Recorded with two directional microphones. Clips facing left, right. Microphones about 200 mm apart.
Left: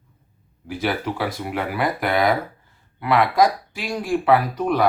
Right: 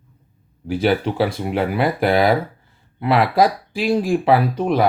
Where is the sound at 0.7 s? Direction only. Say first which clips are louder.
Right 6 dB; 30° right (ahead or behind).